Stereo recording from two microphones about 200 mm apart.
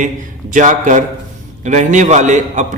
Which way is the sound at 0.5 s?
40° right (ahead or behind).